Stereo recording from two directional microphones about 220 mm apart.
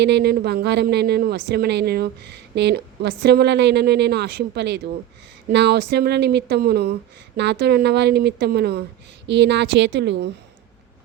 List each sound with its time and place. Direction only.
0.0 s a woman's voice: 50° right (ahead or behind)